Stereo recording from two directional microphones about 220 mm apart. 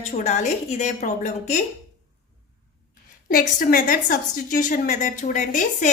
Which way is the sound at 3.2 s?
40° left (ahead or behind).